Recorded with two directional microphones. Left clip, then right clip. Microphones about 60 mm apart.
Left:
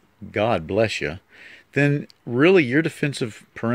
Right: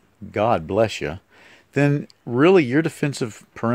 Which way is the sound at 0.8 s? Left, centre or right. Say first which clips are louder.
Left 1 dB; right.